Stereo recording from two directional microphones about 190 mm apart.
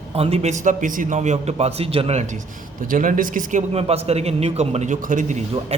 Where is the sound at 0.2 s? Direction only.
30° right (ahead or behind).